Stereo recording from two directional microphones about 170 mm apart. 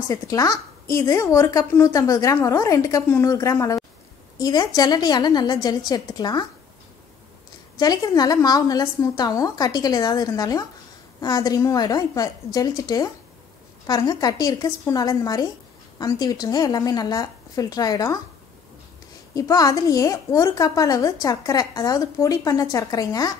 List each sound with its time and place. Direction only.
0.1 s a woman's voice: 20° left (ahead or behind)
7.8 s a woman's voice: 25° left (ahead or behind)
19.3 s a woman's voice: 20° left (ahead or behind)